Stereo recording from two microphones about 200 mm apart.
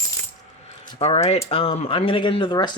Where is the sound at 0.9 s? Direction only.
30° left (ahead or behind).